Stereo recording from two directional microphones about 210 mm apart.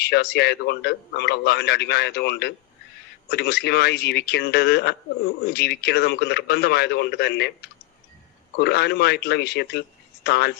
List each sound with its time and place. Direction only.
0.0 s a man's voice: 50° left (ahead or behind)
8.5 s a man's voice: 50° left (ahead or behind)